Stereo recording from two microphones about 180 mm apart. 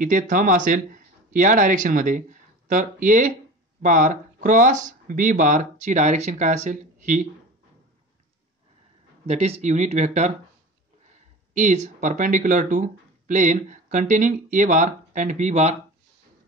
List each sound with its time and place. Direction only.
0.0 s speech: 45° right (ahead or behind)
9.2 s speech: 35° right (ahead or behind)
11.5 s speech: 40° right (ahead or behind)